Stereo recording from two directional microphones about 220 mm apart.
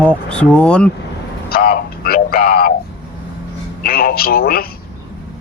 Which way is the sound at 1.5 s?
40° left (ahead or behind).